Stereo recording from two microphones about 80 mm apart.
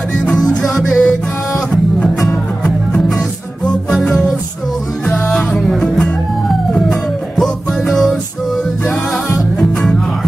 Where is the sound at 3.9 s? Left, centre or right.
Centre.